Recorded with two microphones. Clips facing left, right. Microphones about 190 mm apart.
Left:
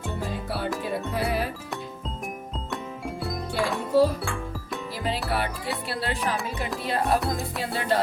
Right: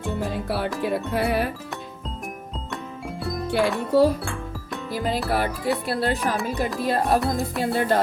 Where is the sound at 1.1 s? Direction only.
60° right (ahead or behind).